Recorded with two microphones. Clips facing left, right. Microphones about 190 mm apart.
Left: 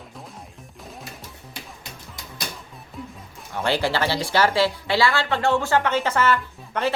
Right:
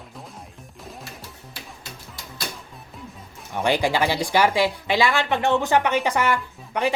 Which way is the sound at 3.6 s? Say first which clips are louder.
Right 2 dB; 15° right (ahead or behind).